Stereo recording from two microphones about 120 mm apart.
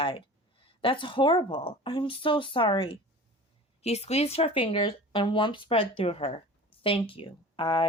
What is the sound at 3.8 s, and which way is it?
Speech, 60° left (ahead or behind).